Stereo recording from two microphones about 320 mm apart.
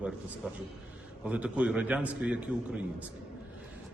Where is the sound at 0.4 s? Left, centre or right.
Centre.